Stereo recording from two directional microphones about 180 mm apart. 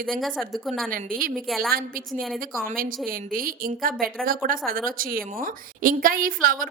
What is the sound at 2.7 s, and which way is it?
A woman's voice, 50° right (ahead or behind).